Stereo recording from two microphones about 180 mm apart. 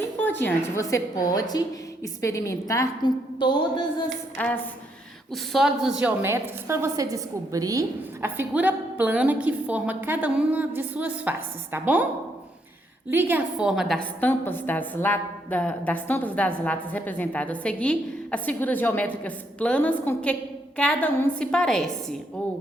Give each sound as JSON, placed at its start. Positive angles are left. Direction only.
{"t": 0.2, "sound": "a woman's voice", "side_deg": 10}
{"t": 4.4, "sound": "a woman's voice", "side_deg": 10}
{"t": 13.1, "sound": "a woman's voice", "side_deg": -10}